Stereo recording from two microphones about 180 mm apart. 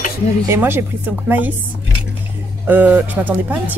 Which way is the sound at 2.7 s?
5° right (ahead or behind).